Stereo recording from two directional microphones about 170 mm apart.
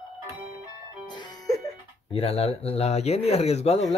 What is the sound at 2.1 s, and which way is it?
Speech, 35° left (ahead or behind).